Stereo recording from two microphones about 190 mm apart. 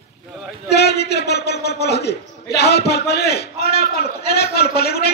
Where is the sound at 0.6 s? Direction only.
60° left (ahead or behind).